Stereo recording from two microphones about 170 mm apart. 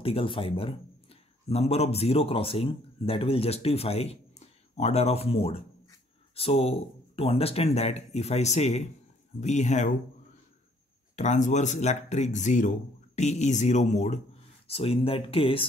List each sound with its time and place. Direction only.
0.0 s a man's voice: 35° left (ahead or behind)
11.1 s speech: 45° left (ahead or behind)